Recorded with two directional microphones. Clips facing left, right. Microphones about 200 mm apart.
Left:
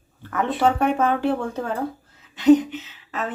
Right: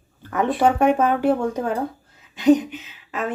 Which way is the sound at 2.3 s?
15° right (ahead or behind).